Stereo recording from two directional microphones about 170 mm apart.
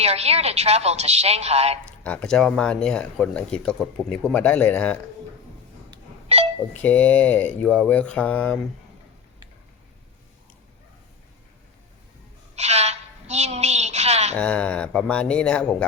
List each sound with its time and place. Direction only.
0.0 s a woman's voice: 40° right (ahead or behind)
2.0 s speech: 5° left (ahead or behind)
6.2 s a sound: 35° right (ahead or behind)
6.8 s speech: 10° left (ahead or behind)
12.5 s a sound: 40° right (ahead or behind)
14.3 s speech: 5° left (ahead or behind)